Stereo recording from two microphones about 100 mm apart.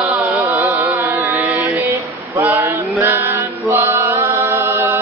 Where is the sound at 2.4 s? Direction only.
20° right (ahead or behind).